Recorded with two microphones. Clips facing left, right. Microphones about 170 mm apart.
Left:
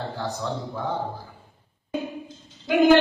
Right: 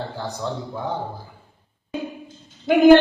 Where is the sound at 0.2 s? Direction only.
15° right (ahead or behind).